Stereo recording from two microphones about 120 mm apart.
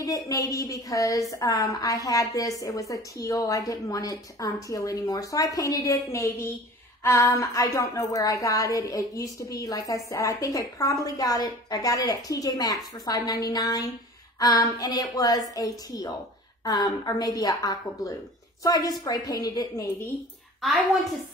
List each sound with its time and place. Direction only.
0.0 s a woman's voice: 30° left (ahead or behind)
20.6 s a woman's voice: centre (ahead or behind)